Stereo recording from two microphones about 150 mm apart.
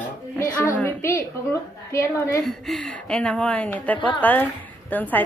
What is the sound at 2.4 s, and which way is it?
A woman's voice, centre (ahead or behind).